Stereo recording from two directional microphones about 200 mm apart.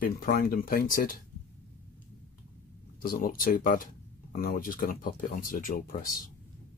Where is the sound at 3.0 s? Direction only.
45° left (ahead or behind).